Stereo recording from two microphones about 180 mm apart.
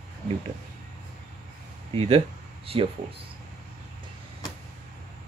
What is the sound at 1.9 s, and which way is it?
Speech, 35° right (ahead or behind).